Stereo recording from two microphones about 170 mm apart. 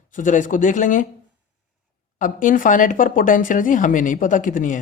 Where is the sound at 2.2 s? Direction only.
50° left (ahead or behind).